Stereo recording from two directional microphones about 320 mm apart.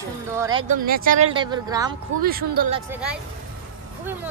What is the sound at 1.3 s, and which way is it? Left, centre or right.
Speech, centre.